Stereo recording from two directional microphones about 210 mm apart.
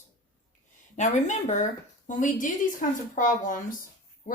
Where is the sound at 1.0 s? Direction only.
35° left (ahead or behind).